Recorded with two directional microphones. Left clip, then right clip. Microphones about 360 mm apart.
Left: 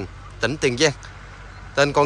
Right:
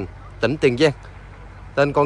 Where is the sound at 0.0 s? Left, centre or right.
Centre.